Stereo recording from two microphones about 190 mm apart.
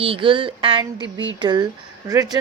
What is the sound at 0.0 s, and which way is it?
Speech, 30° right (ahead or behind).